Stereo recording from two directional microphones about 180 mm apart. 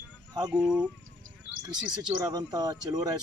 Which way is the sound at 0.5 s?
5° right (ahead or behind).